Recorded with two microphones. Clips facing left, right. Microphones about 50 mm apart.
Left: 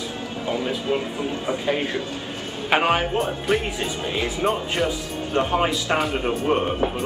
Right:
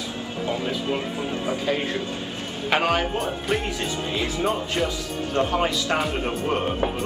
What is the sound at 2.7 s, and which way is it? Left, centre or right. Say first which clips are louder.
Speech: left 2 dB; left.